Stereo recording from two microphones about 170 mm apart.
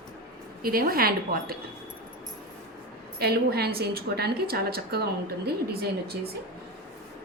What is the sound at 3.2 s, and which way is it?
A woman's voice, 70° right (ahead or behind).